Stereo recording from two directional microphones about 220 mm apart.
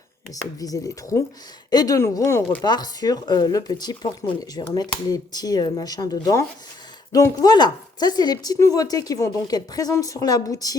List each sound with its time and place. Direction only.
0.6 s speech: 15° left (ahead or behind)